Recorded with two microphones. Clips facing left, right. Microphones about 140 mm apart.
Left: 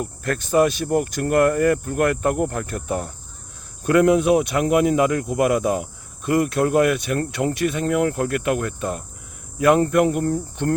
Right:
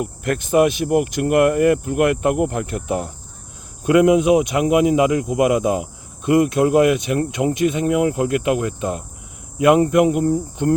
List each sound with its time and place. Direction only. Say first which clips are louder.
0.0 s speech: right 3 dB; 20° right (ahead or behind)
3.8 s speech: right 2 dB; 15° right (ahead or behind)